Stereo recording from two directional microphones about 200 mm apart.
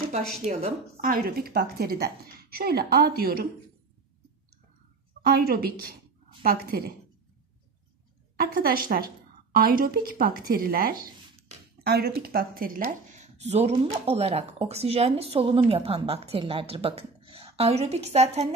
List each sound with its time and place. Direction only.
0.5 s a woman's voice: 35° right (ahead or behind)
5.2 s a woman's voice: 50° right (ahead or behind)
8.4 s a woman's voice: 45° right (ahead or behind)